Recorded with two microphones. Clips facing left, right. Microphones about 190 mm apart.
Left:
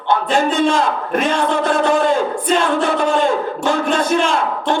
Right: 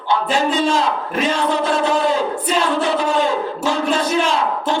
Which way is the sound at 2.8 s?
50° left (ahead or behind).